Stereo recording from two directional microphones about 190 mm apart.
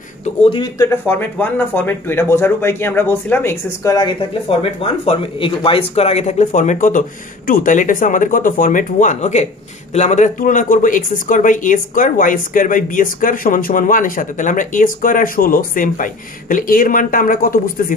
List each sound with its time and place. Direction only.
0.2 s speech: 30° left (ahead or behind)
4.3 s speech: 30° left (ahead or behind); by 17.9 s 45° left (ahead or behind)